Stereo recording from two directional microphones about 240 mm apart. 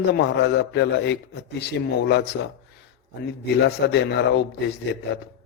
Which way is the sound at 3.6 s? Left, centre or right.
Left.